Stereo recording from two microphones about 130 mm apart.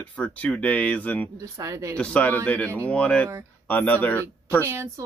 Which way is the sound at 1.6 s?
25° right (ahead or behind).